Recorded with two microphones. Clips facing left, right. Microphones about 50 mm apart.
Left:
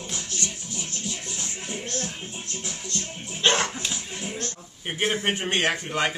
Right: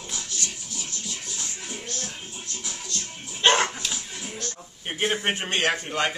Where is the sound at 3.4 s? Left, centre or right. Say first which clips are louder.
Right 2 dB; centre.